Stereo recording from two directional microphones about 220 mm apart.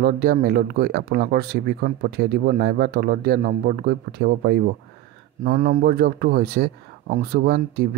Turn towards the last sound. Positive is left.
turn(degrees=-40)  # may be behind; listen again after turning